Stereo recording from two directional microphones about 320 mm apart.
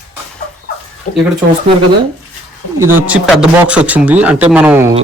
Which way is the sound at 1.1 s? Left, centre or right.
Left.